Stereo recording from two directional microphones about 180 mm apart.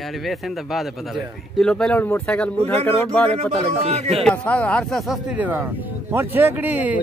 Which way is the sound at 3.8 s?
35° right (ahead or behind).